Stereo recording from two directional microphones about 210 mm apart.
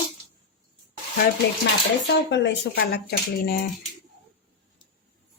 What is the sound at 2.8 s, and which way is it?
Speech, 50° left (ahead or behind).